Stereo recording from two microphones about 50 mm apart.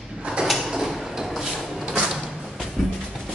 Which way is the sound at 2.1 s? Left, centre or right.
Centre.